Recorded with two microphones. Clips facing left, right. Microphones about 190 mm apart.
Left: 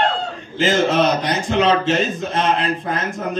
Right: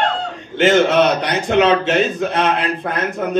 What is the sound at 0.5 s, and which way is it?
A man's voice, 70° right (ahead or behind).